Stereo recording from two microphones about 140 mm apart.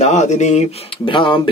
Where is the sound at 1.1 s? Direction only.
35° left (ahead or behind).